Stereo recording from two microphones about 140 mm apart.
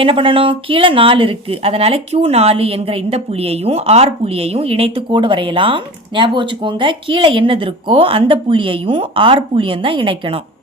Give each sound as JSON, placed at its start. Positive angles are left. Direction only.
{"t": 0.0, "sound": "speech", "side_deg": -40}